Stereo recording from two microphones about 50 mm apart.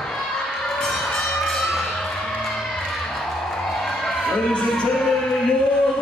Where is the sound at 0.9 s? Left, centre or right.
Centre.